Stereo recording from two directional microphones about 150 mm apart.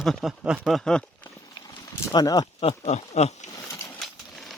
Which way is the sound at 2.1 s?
25° left (ahead or behind).